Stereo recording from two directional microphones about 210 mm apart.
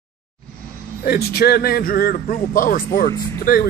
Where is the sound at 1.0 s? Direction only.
45° left (ahead or behind).